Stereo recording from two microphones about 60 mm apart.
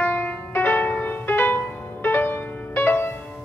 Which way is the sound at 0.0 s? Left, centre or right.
Left.